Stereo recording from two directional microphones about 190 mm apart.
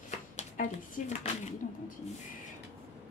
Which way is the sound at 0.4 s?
40° left (ahead or behind).